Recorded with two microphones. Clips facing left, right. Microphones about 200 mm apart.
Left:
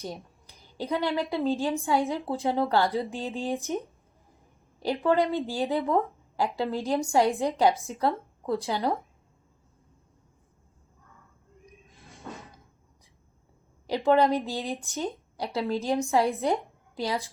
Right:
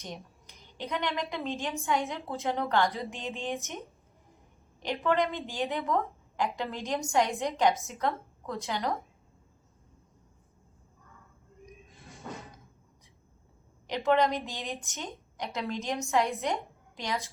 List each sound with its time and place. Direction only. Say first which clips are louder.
0.0 s a woman's voice: left 5 dB; 35° left (ahead or behind)
13.8 s a woman's voice: left 4 dB; 30° left (ahead or behind)